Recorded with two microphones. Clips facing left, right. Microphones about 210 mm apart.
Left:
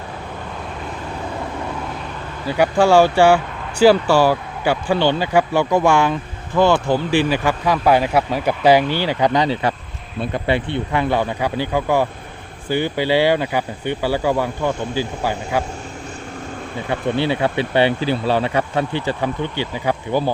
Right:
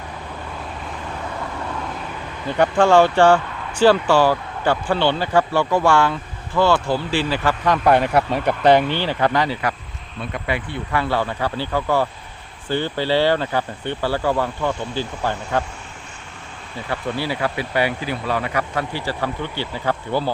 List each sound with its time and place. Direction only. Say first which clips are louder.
2.5 s speech: left 1 dB; 10° left (ahead or behind)
16.9 s speech: left 5 dB; 25° left (ahead or behind)